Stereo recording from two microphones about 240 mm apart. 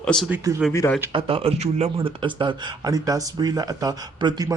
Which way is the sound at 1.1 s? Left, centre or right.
Right.